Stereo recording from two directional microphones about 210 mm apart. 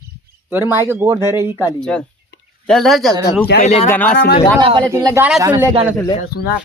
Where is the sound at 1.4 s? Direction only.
10° right (ahead or behind).